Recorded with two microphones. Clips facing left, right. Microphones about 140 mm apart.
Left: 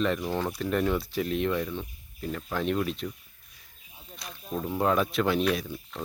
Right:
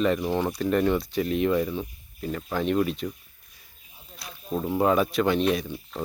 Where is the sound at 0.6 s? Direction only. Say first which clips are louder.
Right 4 dB; centre (ahead or behind).